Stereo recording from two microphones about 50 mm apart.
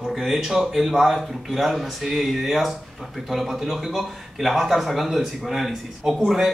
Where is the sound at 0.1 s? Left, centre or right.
Centre.